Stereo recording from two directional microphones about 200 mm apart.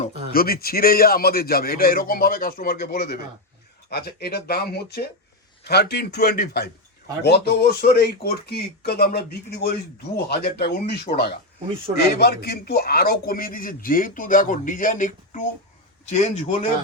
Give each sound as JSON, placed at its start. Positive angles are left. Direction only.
{"t": 0.3, "sound": "speech", "side_deg": 50}
{"t": 12.2, "sound": "a man's voice", "side_deg": 55}